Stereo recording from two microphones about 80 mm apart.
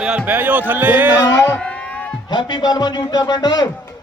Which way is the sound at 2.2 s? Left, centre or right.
Left.